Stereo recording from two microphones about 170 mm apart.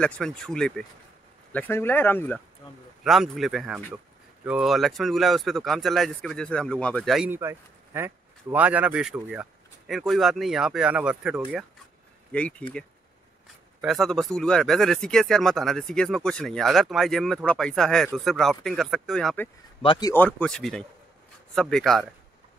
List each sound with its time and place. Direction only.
0.0 s speech: 5° left (ahead or behind)
3.0 s speech: centre (ahead or behind)
7.2 s speech: 15° right (ahead or behind)
12.3 s speech: 5° left (ahead or behind)
13.7 s speech: centre (ahead or behind)
19.8 s speech: 30° left (ahead or behind)
20.1 s speech: 10° left (ahead or behind)